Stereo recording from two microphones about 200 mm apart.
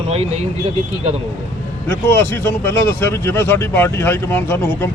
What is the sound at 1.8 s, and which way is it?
Speech, 10° left (ahead or behind).